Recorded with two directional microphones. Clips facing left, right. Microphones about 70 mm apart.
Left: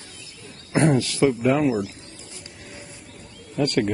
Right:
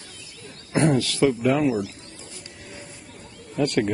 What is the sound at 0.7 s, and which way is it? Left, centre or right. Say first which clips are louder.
Speech: left 1 dB; left.